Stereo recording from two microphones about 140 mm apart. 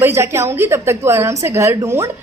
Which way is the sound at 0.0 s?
20° right (ahead or behind).